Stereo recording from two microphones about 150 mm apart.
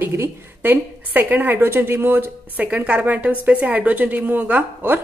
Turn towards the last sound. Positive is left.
turn(degrees=-10)  # may be behind; listen again after turning